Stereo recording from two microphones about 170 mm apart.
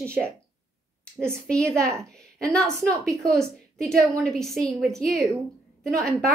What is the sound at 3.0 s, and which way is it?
Speech, 20° right (ahead or behind).